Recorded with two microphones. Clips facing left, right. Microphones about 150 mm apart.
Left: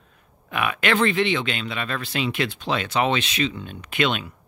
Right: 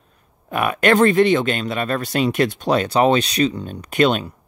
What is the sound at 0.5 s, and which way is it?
Speech, 40° right (ahead or behind).